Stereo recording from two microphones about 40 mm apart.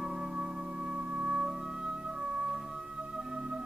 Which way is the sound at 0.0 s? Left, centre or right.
Centre.